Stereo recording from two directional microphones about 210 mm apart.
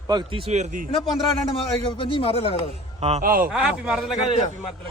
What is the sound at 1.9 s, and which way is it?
Speech, 25° left (ahead or behind).